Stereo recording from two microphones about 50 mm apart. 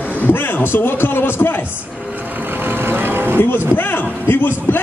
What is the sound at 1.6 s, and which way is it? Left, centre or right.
Music, right.